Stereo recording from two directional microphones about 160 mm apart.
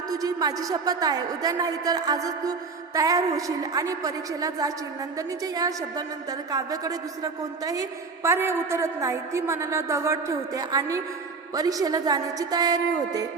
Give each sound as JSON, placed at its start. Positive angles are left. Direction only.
{"t": 0.1, "sound": "a woman's voice", "side_deg": -25}